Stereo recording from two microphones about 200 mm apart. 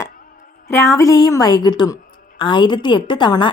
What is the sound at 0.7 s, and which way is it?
A woman's voice, 15° left (ahead or behind).